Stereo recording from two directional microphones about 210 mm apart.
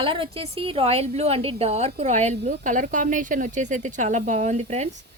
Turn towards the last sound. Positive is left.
turn(degrees=-30)  # may be behind; listen again after turning